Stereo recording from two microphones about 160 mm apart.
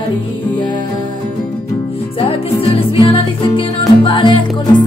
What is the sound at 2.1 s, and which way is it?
Music, 35° left (ahead or behind).